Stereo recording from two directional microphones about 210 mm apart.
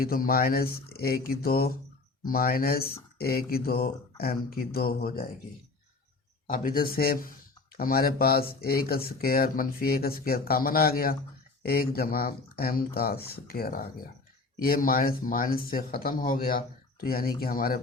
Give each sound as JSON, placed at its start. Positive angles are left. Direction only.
{"t": 0.0, "sound": "speech", "side_deg": 45}
{"t": 6.5, "sound": "speech", "side_deg": 45}